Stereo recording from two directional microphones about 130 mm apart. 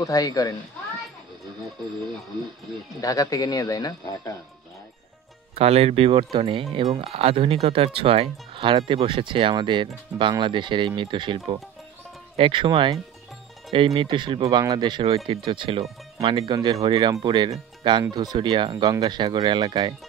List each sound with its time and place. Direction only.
0.0 s speech: 30° left (ahead or behind)
3.0 s speech: 30° left (ahead or behind)
5.6 s speech: 50° right (ahead or behind)
14.4 s speech: 30° right (ahead or behind)
15.1 s speech: 50° right (ahead or behind)
16.4 s speech: 30° right (ahead or behind)